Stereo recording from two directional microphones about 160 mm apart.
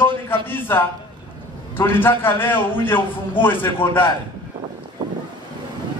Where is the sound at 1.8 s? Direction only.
15° left (ahead or behind).